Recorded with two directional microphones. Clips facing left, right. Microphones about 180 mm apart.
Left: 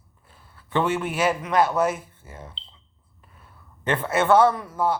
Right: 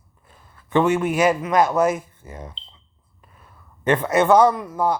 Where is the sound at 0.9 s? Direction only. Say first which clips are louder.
Right 5 dB; 45° right (ahead or behind).